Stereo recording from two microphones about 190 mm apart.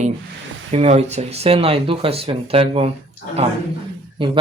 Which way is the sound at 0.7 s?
35° right (ahead or behind).